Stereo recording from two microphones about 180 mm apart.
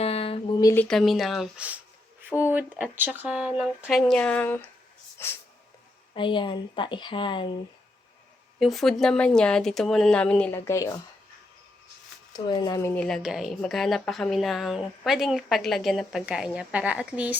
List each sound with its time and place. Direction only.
0.0 s a sound: 35° left (ahead or behind)
0.6 s speech: 15° left (ahead or behind)
0.9 s a woman's voice: centre (ahead or behind)
6.1 s a woman's voice: 25° left (ahead or behind)
8.5 s a woman's voice: centre (ahead or behind); by 10.9 s 15° left (ahead or behind)
12.3 s a woman's voice: 25° left (ahead or behind); by 17.3 s 5° right (ahead or behind)